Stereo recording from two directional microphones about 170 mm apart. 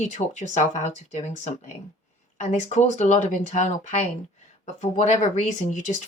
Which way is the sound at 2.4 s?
40° left (ahead or behind).